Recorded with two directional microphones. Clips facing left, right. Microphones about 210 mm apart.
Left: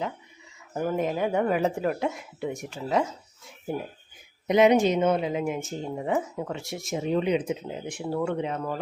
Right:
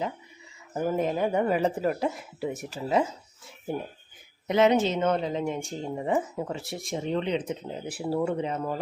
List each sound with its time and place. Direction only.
0.7 s speech: 5° right (ahead or behind)
4.4 s speech: 15° left (ahead or behind)
8.0 s speech: 5° right (ahead or behind)